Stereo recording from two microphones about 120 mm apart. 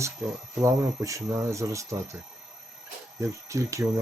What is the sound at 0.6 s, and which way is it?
Speech, 25° right (ahead or behind).